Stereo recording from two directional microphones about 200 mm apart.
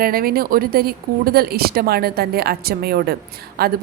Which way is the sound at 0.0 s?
45° right (ahead or behind).